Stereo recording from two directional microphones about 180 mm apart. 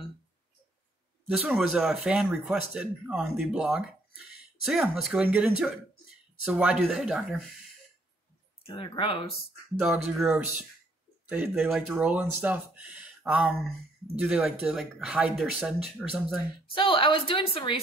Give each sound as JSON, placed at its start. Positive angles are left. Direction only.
{"t": 1.3, "sound": "speech", "side_deg": 0}
{"t": 8.6, "sound": "a woman's voice", "side_deg": 30}
{"t": 9.8, "sound": "speech", "side_deg": 0}
{"t": 16.7, "sound": "a woman's voice", "side_deg": 30}